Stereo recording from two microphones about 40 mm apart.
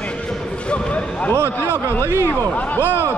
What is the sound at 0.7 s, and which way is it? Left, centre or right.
Speech, left.